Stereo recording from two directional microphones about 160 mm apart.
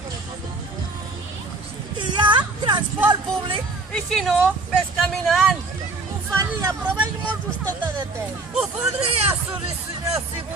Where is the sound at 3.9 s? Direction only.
Centre (ahead or behind).